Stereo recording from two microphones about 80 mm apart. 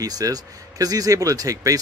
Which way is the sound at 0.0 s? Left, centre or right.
Right.